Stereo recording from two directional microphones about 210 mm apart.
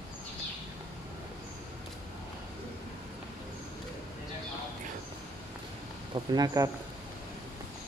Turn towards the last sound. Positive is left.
turn(degrees=-20)  # may be behind; listen again after turning